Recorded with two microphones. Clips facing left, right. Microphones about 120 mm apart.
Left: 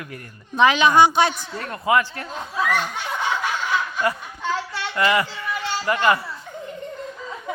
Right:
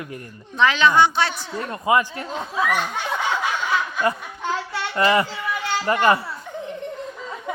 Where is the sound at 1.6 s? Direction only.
20° right (ahead or behind).